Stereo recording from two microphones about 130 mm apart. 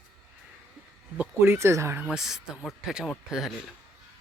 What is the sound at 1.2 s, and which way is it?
Speech, 20° right (ahead or behind).